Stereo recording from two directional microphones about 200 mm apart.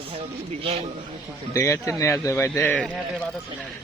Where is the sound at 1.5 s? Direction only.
15° left (ahead or behind).